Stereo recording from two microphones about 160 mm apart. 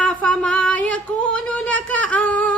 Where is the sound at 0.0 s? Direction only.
5° left (ahead or behind).